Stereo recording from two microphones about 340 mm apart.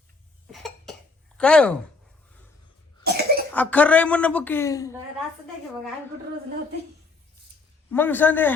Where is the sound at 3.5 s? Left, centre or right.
Centre.